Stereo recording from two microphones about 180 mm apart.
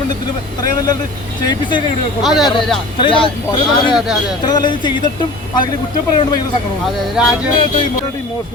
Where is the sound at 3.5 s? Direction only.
25° left (ahead or behind).